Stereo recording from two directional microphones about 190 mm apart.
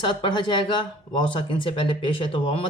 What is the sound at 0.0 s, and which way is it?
A woman's voice, 25° left (ahead or behind).